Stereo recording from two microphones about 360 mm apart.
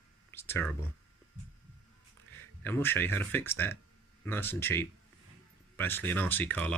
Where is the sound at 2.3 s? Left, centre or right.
Centre.